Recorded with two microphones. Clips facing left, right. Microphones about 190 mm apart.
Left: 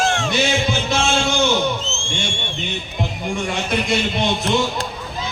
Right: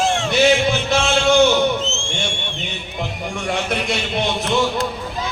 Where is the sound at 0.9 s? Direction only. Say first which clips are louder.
Right 5 dB; 65° right (ahead or behind).